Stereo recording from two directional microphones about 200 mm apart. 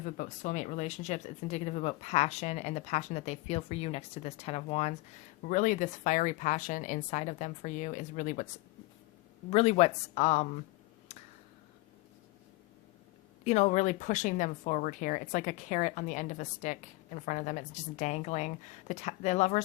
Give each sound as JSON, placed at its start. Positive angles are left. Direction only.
{"t": 0.0, "sound": "speech", "side_deg": 40}
{"t": 9.5, "sound": "speech", "side_deg": 30}
{"t": 11.1, "sound": "finger snapping", "side_deg": 30}
{"t": 13.4, "sound": "speech", "side_deg": 35}